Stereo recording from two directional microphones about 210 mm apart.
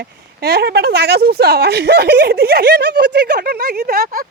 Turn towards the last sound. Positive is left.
turn(degrees=-45)  # may be behind; listen again after turning